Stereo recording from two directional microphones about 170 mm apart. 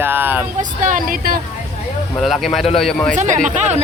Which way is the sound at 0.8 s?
50° right (ahead or behind).